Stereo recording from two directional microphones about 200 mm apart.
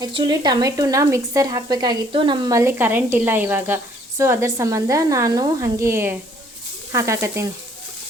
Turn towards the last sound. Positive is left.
turn(degrees=-15)  # may be behind; listen again after turning